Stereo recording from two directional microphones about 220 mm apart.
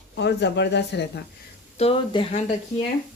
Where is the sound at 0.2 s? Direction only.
50° left (ahead or behind).